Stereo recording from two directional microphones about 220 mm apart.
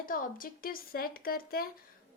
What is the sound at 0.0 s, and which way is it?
A woman's voice, 40° left (ahead or behind).